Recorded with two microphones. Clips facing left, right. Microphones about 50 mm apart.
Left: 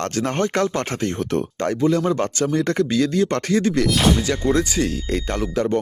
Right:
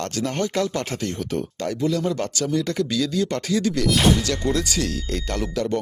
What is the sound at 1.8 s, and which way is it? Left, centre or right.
Speech, left.